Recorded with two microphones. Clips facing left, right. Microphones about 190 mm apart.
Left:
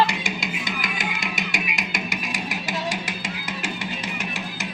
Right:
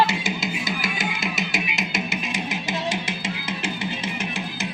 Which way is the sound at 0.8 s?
25° right (ahead or behind).